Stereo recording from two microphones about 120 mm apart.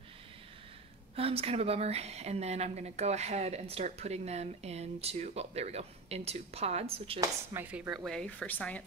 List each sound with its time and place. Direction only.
1.1 s speech: 55° right (ahead or behind)
7.5 s speech: 20° right (ahead or behind)
7.9 s speech: centre (ahead or behind)